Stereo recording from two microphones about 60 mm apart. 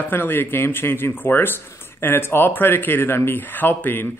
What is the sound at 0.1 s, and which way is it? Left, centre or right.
Speech, left.